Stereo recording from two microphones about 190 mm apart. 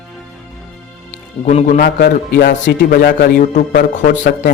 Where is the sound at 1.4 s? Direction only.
40° left (ahead or behind).